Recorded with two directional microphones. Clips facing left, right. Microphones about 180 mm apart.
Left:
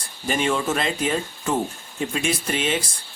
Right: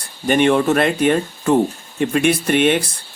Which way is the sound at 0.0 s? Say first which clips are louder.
Right 9 dB; 65° right (ahead or behind).